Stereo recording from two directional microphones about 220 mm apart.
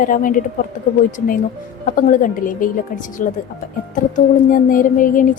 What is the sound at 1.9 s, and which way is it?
A woman's voice, 40° left (ahead or behind).